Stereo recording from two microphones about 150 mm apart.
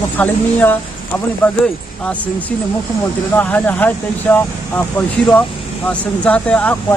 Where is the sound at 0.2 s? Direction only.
10° left (ahead or behind).